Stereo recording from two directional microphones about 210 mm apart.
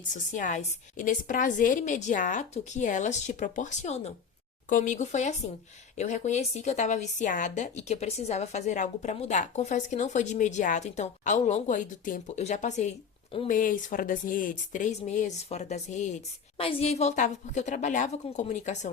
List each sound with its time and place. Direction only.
0.1 s a woman's voice: 35° left (ahead or behind)